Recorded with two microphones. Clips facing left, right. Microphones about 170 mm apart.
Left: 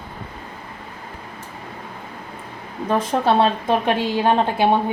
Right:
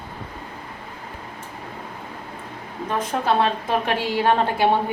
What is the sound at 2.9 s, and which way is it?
A woman's voice, 30° left (ahead or behind).